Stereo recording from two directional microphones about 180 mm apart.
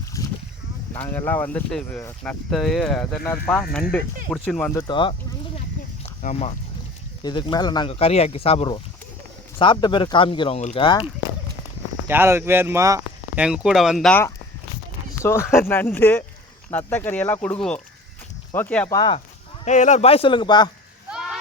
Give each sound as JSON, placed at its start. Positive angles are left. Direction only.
{"t": 1.1, "sound": "speech", "side_deg": 10}
{"t": 5.5, "sound": "a sound", "side_deg": 35}
{"t": 7.2, "sound": "speech", "side_deg": 25}
{"t": 12.0, "sound": "speech", "side_deg": -10}
{"t": 13.4, "sound": "speech", "side_deg": -5}
{"t": 15.2, "sound": "speech", "side_deg": 15}
{"t": 18.9, "sound": "speech", "side_deg": 25}
{"t": 19.6, "sound": "speech", "side_deg": 40}
{"t": 21.1, "sound": "a sound", "side_deg": -5}